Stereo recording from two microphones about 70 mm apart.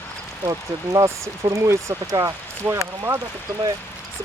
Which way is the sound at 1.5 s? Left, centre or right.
Right.